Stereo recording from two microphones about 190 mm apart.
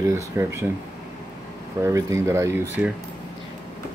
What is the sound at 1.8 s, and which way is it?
Speech, 15° right (ahead or behind).